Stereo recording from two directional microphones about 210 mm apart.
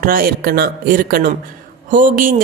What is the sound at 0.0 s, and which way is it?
A woman's voice, 45° right (ahead or behind).